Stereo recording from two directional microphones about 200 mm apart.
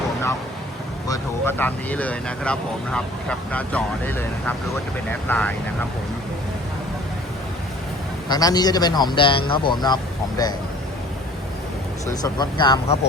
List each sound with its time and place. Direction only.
1.0 s speech: 15° left (ahead or behind)
8.3 s speech: 20° left (ahead or behind)
12.2 s speech: 20° left (ahead or behind)